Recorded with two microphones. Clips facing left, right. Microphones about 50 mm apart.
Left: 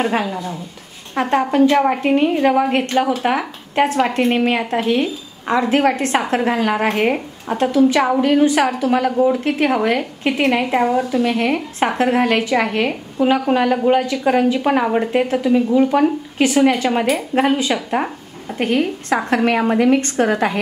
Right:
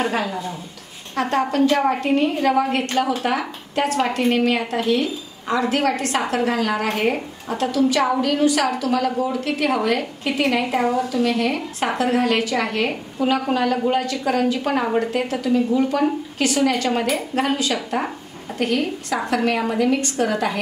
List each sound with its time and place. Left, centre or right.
0.1 s a woman's voice: centre
10.8 s speech: centre
11.2 s a woman's voice: left